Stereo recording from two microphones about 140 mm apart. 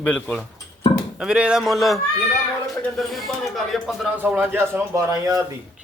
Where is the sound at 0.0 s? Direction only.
10° left (ahead or behind).